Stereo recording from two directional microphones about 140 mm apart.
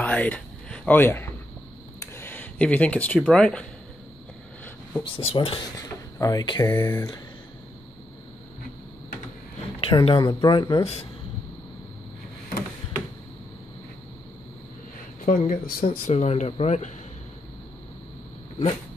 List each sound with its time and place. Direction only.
0.0 s a sound: 10° left (ahead or behind)
2.0 s speech: 15° left (ahead or behind)
5.2 s speech: 45° left (ahead or behind)
5.8 s speech: 25° left (ahead or behind)
9.8 s speech: 40° left (ahead or behind)
15.2 s speech: 70° left (ahead or behind); by 16.9 s 55° left (ahead or behind)